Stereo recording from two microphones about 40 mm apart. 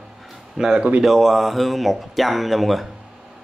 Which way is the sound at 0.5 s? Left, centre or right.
Centre.